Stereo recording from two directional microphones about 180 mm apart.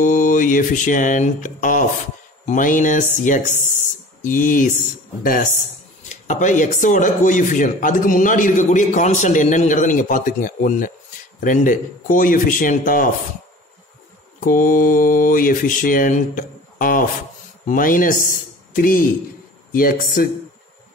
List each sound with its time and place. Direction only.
0.0 s speech: 45° left (ahead or behind)
6.0 s speech: 40° left (ahead or behind)
14.4 s speech: 50° left (ahead or behind)